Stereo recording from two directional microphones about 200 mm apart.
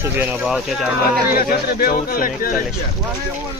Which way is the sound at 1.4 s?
45° left (ahead or behind).